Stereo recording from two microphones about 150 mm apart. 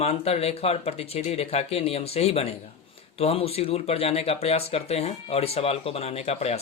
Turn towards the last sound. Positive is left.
turn(degrees=45)  # may be behind; listen again after turning